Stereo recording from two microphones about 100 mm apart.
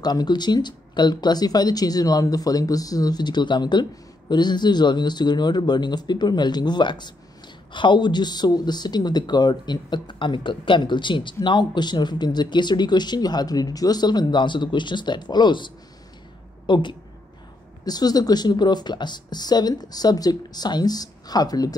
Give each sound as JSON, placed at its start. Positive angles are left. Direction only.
{"t": 0.0, "sound": "a woman's voice", "side_deg": 45}
{"t": 17.8, "sound": "speech", "side_deg": 40}